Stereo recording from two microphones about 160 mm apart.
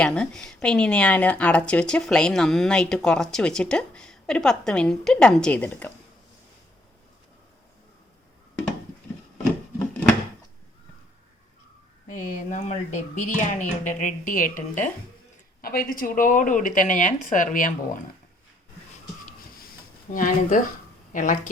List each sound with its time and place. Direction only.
0.0 s speech: 5° left (ahead or behind)
12.1 s speech: 55° left (ahead or behind)
15.6 s speech: 65° left (ahead or behind)
20.1 s a woman's voice: 55° left (ahead or behind)